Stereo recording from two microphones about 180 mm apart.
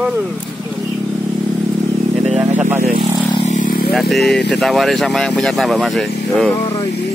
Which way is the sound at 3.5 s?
50° left (ahead or behind).